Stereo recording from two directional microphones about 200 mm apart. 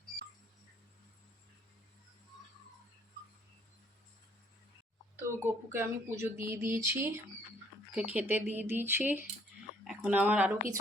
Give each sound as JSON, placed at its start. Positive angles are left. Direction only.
{"t": 5.4, "sound": "speech", "side_deg": -10}